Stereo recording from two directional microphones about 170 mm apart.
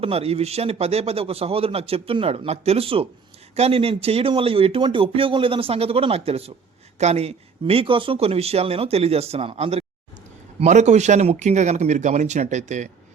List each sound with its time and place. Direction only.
0.0 s speech: 35° right (ahead or behind)